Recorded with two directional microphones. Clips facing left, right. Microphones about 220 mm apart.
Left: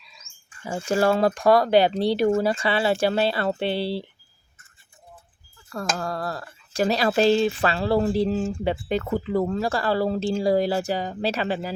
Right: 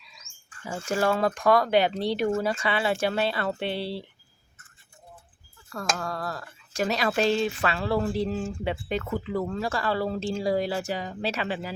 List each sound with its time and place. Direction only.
0.9 s speech: 30° left (ahead or behind)
6.0 s speech: 35° left (ahead or behind)